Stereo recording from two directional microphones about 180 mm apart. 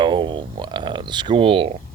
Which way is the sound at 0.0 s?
25° right (ahead or behind).